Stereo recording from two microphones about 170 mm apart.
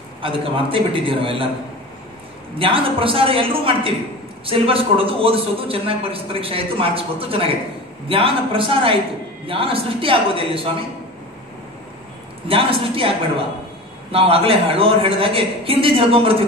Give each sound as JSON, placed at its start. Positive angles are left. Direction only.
{"t": 0.2, "sound": "a man's voice", "side_deg": -30}
{"t": 2.6, "sound": "a man's voice", "side_deg": -30}
{"t": 12.4, "sound": "a man's voice", "side_deg": -35}